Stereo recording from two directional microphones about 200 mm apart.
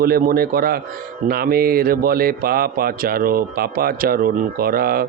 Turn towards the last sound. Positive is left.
turn(degrees=-50)  # may be behind; listen again after turning